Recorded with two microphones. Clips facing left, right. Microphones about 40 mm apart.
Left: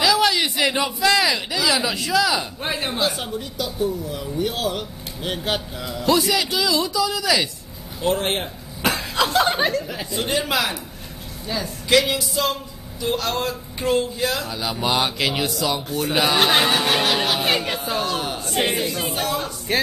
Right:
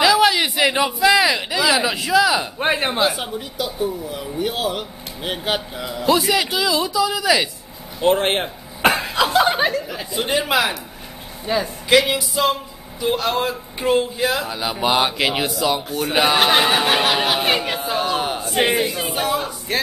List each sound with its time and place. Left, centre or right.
0.0 s a sound: centre
0.9 s speech: centre
2.6 s speech: right
3.1 s speech: centre
8.0 s a sound: right
9.1 s chuckle: centre
10.2 s speech: centre
11.4 s a man's voice: right
12.0 s speech: centre